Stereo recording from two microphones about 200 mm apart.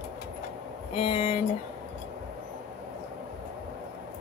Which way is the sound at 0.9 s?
30° left (ahead or behind).